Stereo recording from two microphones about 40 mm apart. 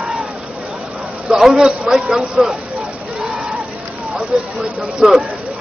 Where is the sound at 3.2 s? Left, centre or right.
Centre.